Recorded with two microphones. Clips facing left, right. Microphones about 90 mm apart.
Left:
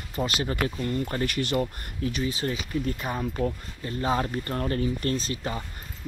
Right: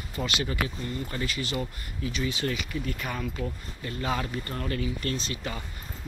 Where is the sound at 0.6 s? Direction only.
50° left (ahead or behind).